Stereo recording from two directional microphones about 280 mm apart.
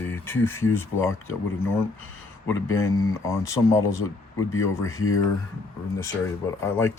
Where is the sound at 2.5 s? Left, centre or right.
Centre.